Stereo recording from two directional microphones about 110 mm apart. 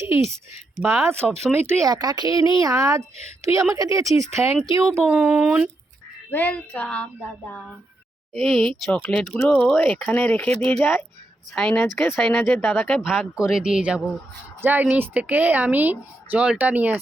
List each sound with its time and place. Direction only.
0.0 s speech: 25° right (ahead or behind)
1.9 s a woman's voice: 35° right (ahead or behind)
5.0 s a woman's voice: 10° right (ahead or behind)
6.3 s speech: 15° left (ahead or behind)
8.3 s speech: 5° left (ahead or behind)
12.5 s speech: 20° left (ahead or behind)
13.3 s a woman's voice: 5° right (ahead or behind)